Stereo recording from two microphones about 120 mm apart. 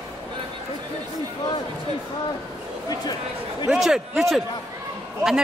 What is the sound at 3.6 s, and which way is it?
Speech, 5° right (ahead or behind).